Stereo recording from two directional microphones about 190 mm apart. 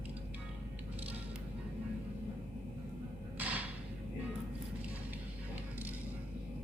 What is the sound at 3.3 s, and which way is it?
Thump, 10° right (ahead or behind).